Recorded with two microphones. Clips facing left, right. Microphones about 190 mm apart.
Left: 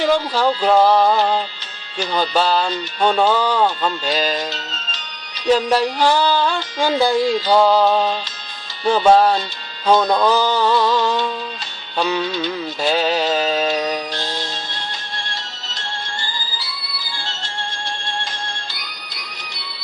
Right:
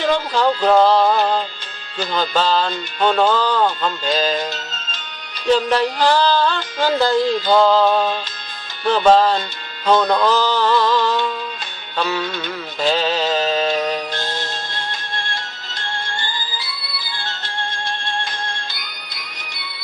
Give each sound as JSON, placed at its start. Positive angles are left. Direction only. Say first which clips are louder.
{"t": 0.0, "sound": "speech", "louder": "left 1 dB", "side_deg": 10}
{"t": 5.5, "sound": "speech", "louder": "even", "side_deg": 10}
{"t": 15.2, "sound": "music", "louder": "right 2 dB", "side_deg": -55}
{"t": 17.1, "sound": "music", "louder": "right 1 dB", "side_deg": -55}